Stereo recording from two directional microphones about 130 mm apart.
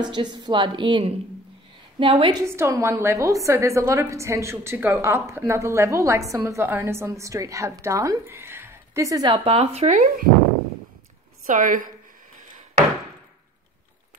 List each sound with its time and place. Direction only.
0.0 s a woman's voice: 35° right (ahead or behind)
2.4 s a woman's voice: 20° right (ahead or behind); by 10.3 s 85° right
11.4 s a woman's voice: 90° right